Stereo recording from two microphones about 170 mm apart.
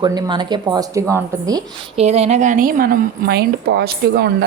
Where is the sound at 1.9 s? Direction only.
40° right (ahead or behind).